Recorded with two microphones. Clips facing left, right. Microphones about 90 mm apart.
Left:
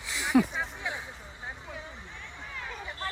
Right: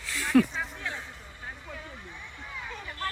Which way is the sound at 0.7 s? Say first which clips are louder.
Left 1 dB; 15° left (ahead or behind).